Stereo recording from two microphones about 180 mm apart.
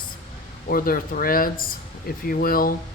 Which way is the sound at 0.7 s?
55° left (ahead or behind).